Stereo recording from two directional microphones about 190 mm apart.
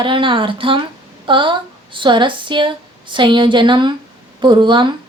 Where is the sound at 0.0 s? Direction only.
25° right (ahead or behind).